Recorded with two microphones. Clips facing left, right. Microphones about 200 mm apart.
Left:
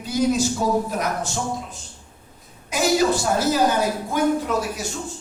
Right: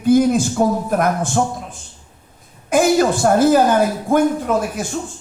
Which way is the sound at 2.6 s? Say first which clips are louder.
Right 5 dB; 50° right (ahead or behind).